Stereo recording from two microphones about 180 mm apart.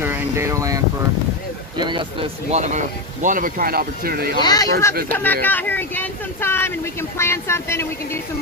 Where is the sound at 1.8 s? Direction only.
25° right (ahead or behind); by 4.4 s 55° right (ahead or behind).